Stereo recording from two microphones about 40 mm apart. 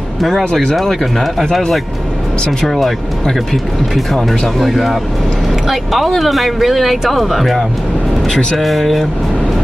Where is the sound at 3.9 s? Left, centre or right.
Centre.